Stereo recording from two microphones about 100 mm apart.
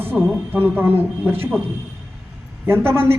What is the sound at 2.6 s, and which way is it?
Speech, 20° right (ahead or behind).